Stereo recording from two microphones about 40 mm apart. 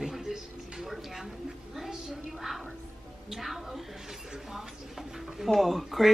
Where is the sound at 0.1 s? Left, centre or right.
Centre.